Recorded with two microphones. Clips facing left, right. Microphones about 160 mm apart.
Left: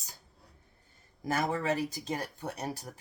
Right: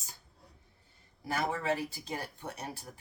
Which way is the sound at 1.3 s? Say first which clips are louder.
Left 2 dB; 40° left (ahead or behind).